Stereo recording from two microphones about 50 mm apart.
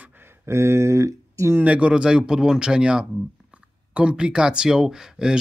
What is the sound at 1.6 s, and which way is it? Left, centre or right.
Speech, right.